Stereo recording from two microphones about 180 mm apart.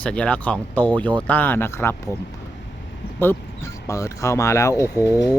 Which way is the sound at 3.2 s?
15° left (ahead or behind).